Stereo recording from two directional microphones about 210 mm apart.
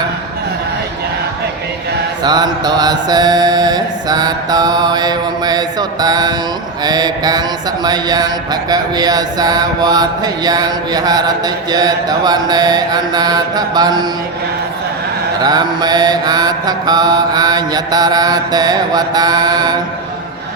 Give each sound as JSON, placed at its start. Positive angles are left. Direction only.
{"t": 2.2, "sound": "mantra", "side_deg": -20}
{"t": 15.4, "sound": "mantra", "side_deg": -20}